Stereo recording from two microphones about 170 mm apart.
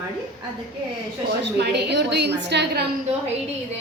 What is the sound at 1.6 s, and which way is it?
A woman's voice, 80° right.